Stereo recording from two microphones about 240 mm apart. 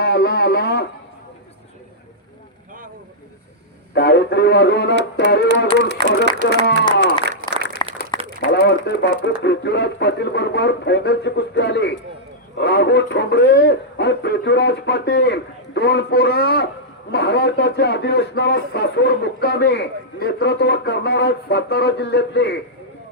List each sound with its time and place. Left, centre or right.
0.0 s a sound: left
3.9 s speech: left
5.6 s speech: right
6.4 s speech: left
7.0 s applause: right
8.1 s a sound: centre
8.5 s speech: left